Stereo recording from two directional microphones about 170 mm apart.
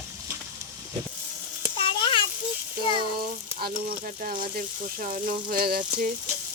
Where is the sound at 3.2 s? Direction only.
60° right (ahead or behind).